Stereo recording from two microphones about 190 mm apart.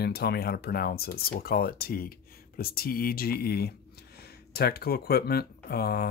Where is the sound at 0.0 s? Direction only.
55° left (ahead or behind).